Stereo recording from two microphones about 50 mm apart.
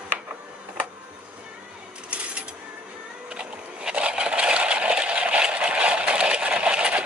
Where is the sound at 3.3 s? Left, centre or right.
Centre.